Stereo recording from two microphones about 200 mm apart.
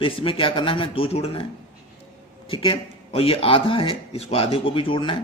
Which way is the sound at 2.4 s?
25° left (ahead or behind).